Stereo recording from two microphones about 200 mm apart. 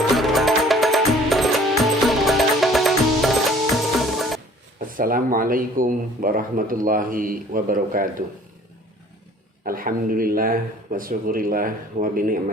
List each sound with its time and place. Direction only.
0.1 s music: centre (ahead or behind)
4.9 s speech: 45° right (ahead or behind)
9.6 s speech: 45° right (ahead or behind)